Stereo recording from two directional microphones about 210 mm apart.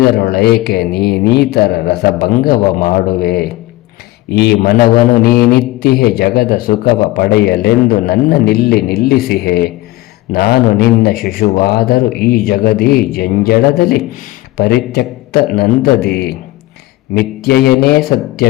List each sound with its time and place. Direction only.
0.2 s a man's voice: 45° left (ahead or behind)